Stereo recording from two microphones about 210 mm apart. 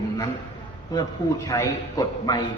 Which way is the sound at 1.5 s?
15° left (ahead or behind).